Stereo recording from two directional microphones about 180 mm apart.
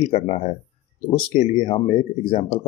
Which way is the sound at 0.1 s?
35° left (ahead or behind).